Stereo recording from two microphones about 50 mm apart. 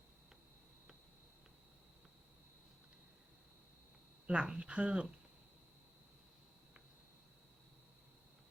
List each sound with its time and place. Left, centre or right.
4.3 s speech: right